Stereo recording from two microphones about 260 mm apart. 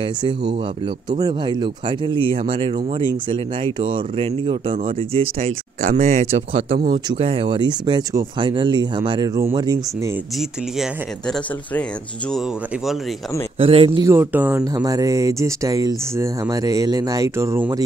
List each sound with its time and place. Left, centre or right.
1.2 s speech: centre
10.8 s speech: centre
13.6 s speech: right